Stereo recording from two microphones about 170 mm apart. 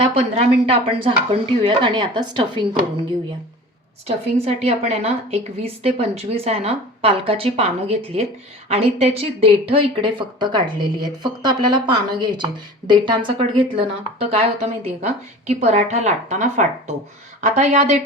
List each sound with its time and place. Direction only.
0.0 s a woman's voice: 35° right (ahead or behind)
4.0 s a woman's voice: 40° right (ahead or behind)